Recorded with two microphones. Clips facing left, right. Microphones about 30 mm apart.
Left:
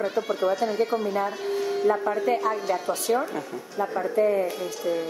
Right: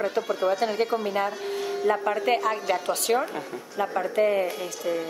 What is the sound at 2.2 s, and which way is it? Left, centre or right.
Speech, right.